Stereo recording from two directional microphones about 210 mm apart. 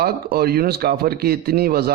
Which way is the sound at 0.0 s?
50° right (ahead or behind).